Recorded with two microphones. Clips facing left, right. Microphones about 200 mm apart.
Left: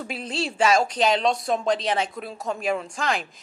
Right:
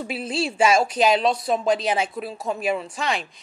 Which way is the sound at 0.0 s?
5° right (ahead or behind).